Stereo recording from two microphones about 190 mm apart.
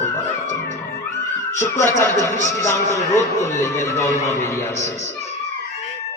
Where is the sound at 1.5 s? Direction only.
15° left (ahead or behind).